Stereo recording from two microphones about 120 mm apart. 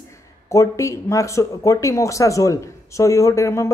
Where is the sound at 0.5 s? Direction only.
25° left (ahead or behind).